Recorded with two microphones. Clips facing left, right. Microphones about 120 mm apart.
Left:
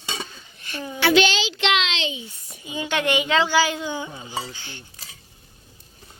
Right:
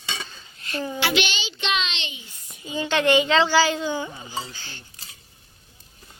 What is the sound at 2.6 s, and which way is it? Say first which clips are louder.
Speech: right 3 dB; 15° left (ahead or behind).